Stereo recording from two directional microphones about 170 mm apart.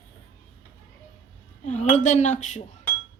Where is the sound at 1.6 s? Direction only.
45° left (ahead or behind).